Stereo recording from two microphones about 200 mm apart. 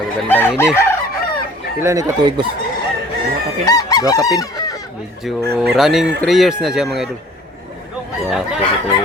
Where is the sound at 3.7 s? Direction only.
20° left (ahead or behind).